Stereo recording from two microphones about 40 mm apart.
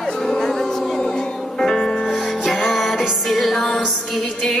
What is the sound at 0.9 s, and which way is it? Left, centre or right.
Music, centre.